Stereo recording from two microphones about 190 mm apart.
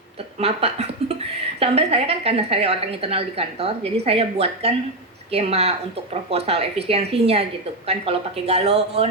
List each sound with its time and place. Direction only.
0.3 s a woman's voice: 35° right (ahead or behind)